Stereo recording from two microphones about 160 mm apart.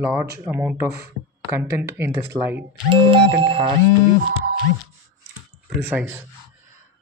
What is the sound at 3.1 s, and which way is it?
Speech, 30° right (ahead or behind).